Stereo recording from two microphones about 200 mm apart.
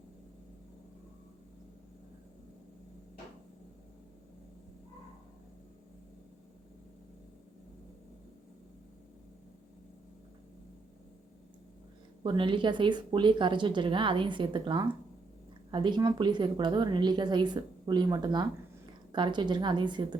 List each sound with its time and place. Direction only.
12.2 s a woman's voice: 25° right (ahead or behind)